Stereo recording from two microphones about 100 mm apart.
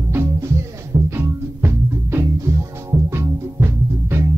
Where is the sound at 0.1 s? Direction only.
25° right (ahead or behind).